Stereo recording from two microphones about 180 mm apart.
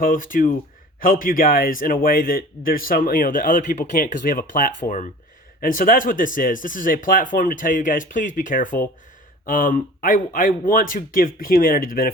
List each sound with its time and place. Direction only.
0.0 s a man's voice: 50° left (ahead or behind)